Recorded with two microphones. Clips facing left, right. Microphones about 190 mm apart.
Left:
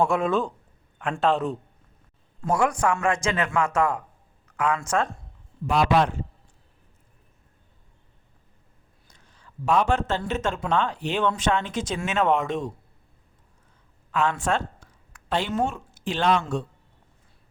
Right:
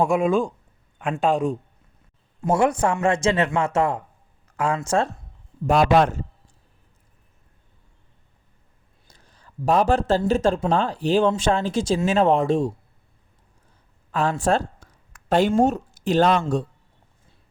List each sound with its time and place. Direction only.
0.0 s speech: 15° right (ahead or behind)
2.4 s a man's voice: 25° right (ahead or behind)
5.6 s a man's voice: 45° right (ahead or behind)
9.0 s speech: 35° right (ahead or behind)
14.1 s a sound: 35° right (ahead or behind)
15.6 s a woman's voice: 40° right (ahead or behind)